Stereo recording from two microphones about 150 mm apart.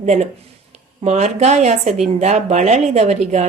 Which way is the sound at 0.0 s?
50° right (ahead or behind).